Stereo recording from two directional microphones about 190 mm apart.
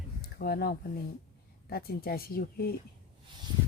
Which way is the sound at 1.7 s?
55° left (ahead or behind).